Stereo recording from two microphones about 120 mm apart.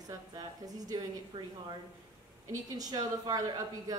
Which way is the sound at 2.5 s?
30° right (ahead or behind).